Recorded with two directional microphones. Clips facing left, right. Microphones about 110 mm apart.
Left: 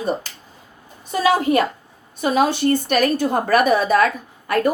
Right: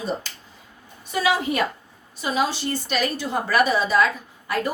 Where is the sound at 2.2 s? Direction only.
55° left (ahead or behind).